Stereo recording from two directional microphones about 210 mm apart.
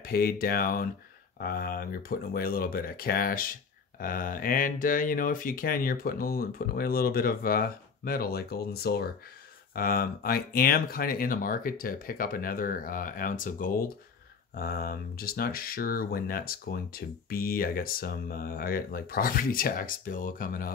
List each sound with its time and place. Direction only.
0.0 s speech: 45° left (ahead or behind)